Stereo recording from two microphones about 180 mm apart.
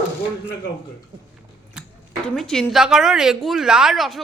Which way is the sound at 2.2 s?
Centre (ahead or behind).